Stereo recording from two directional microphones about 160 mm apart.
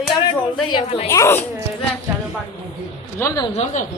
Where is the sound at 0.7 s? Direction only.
30° left (ahead or behind).